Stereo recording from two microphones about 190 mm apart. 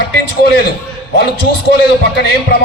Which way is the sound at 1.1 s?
55° left (ahead or behind).